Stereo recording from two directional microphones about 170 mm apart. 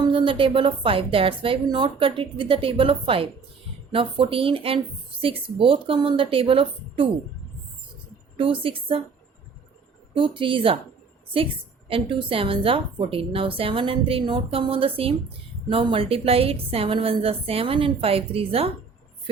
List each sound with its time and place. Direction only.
0.0 s a woman's voice: 30° right (ahead or behind)
8.4 s a woman's voice: 30° right (ahead or behind)
10.2 s a woman's voice: 30° right (ahead or behind)